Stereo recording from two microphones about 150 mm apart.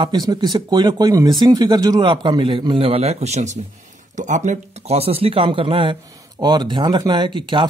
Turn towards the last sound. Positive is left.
turn(degrees=-30)  # may be behind; listen again after turning